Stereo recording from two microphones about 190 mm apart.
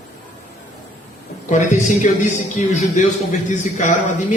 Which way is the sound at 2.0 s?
40° left (ahead or behind).